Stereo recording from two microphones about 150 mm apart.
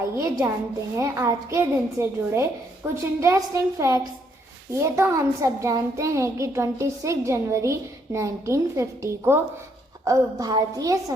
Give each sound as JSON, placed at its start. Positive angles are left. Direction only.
{"t": 0.2, "sound": "a child's voice", "side_deg": -20}